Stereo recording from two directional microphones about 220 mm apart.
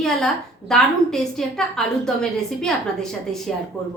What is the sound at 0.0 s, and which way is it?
A woman's voice, centre (ahead or behind).